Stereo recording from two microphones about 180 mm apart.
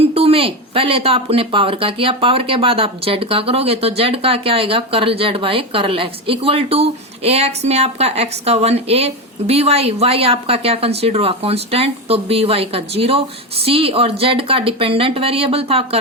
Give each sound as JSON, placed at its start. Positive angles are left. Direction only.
{"t": 0.0, "sound": "speech", "side_deg": -35}